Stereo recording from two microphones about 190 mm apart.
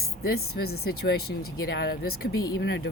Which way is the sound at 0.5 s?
55° left (ahead or behind).